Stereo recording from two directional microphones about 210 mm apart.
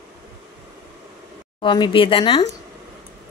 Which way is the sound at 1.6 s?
20° left (ahead or behind).